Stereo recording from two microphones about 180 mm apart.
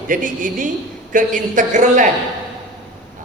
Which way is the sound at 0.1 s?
45° right (ahead or behind).